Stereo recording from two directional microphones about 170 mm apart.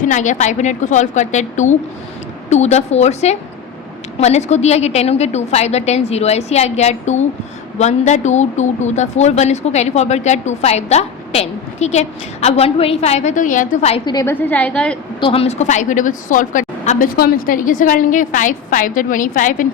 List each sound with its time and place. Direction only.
0.0 s a woman's voice: 45° left (ahead or behind)
13.9 s a woman's voice: 25° left (ahead or behind)
14.4 s a woman's voice: 10° left (ahead or behind)
15.2 s a woman's voice: 35° left (ahead or behind)
17.2 s a woman's voice: 60° left (ahead or behind)